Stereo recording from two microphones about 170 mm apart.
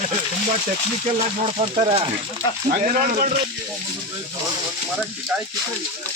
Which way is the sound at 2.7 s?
50° right (ahead or behind).